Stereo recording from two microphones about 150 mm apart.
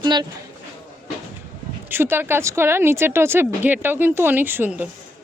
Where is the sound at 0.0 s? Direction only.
25° right (ahead or behind).